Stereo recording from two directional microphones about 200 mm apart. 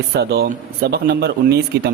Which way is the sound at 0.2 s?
50° right (ahead or behind).